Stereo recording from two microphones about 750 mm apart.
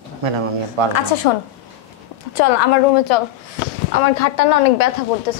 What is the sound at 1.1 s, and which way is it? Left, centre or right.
Speech, left.